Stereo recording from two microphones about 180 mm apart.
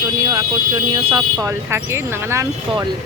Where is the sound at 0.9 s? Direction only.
30° right (ahead or behind).